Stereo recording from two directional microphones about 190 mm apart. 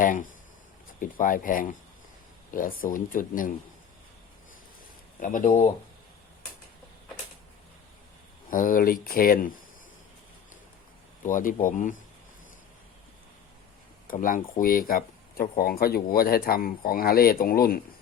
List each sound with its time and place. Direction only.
0.0 s speech: 45° left (ahead or behind)
5.2 s speech: 40° left (ahead or behind)
8.4 s speech: 45° left (ahead or behind)
11.3 s speech: 45° left (ahead or behind)
14.1 s speech: 45° left (ahead or behind)